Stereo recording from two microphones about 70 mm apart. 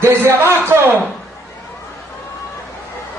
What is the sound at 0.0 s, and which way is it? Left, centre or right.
Speech, right.